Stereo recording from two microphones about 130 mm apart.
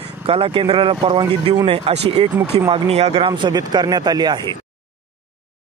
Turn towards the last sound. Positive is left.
turn(degrees=-30)  # may be behind; listen again after turning